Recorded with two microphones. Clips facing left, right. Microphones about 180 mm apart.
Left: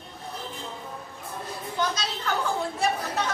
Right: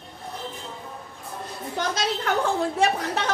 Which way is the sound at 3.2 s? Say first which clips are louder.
Right 2 dB; 90° right.